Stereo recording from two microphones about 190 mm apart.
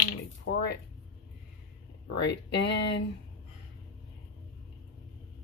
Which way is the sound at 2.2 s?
65° left (ahead or behind).